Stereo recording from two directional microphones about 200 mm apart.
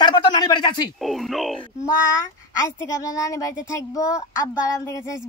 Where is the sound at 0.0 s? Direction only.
20° left (ahead or behind).